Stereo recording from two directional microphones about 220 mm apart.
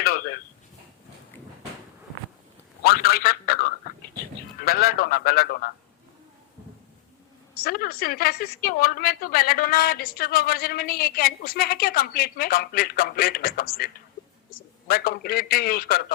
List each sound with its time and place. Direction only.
0.0 s a sound: 45° left (ahead or behind)
2.8 s a man's voice: 45° left (ahead or behind)
7.6 s a woman's voice: 45° left (ahead or behind)